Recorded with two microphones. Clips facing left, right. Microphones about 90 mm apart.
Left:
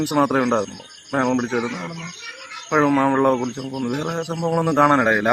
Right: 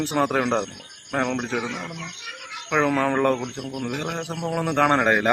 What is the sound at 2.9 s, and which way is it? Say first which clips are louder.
Cricket: left 4 dB; 15° left (ahead or behind).